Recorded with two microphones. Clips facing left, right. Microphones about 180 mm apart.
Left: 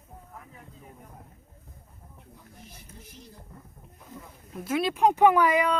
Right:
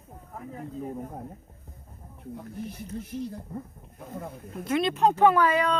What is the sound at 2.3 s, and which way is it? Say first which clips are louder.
Speech: right 16 dB; 60° right (ahead or behind).